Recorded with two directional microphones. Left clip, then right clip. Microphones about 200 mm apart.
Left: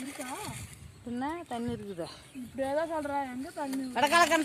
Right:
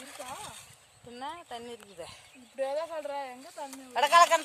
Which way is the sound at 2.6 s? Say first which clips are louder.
Left 2 dB; 30° left (ahead or behind).